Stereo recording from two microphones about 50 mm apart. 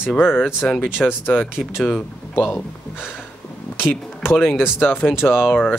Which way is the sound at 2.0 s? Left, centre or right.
Left.